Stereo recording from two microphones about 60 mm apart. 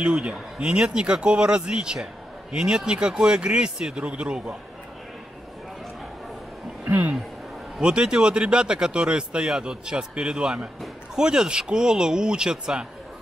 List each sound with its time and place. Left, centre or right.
0.0 s speech: centre
6.8 s speech: right
7.8 s speech: centre